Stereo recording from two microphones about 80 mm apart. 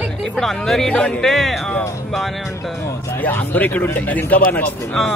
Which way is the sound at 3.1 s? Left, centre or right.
Left.